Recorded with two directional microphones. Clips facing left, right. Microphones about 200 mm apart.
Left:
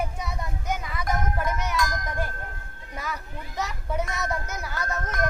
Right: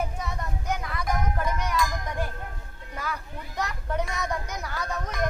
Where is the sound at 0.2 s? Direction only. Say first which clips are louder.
Even; 10° left (ahead or behind).